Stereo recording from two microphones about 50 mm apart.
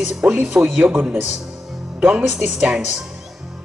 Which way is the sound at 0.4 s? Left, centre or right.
Right.